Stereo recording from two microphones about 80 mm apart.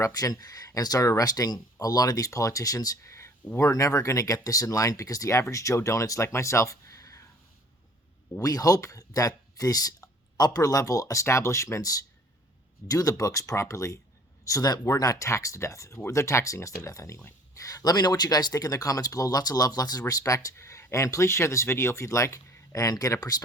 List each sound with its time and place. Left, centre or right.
0.0 s speech: left
3.1 s a sound: left
3.6 s speech: left
8.4 s speech: left